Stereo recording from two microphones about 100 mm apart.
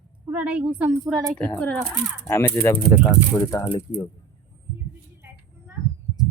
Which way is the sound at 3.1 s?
35° left (ahead or behind).